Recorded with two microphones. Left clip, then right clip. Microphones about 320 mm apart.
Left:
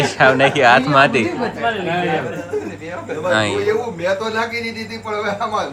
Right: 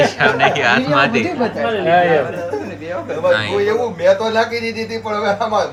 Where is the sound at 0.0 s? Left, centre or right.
Centre.